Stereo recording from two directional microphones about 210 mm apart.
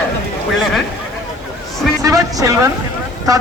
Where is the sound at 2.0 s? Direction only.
15° right (ahead or behind).